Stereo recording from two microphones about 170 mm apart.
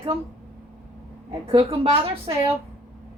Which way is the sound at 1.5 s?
30° right (ahead or behind).